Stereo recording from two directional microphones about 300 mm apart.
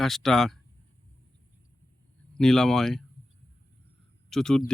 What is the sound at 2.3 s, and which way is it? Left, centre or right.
Speech, centre.